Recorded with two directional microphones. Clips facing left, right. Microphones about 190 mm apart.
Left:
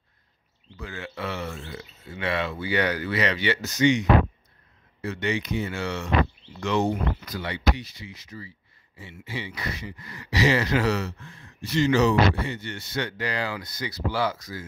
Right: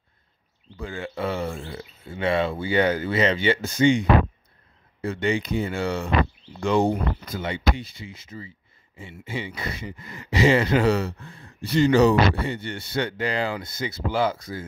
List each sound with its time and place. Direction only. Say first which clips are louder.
0.7 s speech: right 5 dB; 30° right (ahead or behind)